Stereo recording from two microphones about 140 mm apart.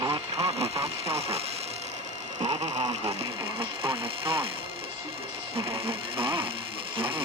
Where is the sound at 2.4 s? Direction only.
45° right (ahead or behind).